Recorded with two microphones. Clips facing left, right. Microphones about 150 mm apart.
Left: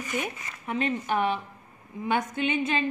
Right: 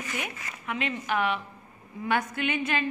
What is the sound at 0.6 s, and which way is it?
A woman's voice, 35° left (ahead or behind).